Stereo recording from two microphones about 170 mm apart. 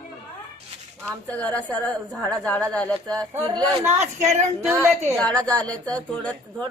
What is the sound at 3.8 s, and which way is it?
Speech, 40° right (ahead or behind).